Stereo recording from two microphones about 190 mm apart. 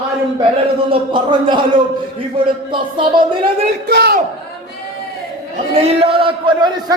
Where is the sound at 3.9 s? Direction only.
55° right (ahead or behind).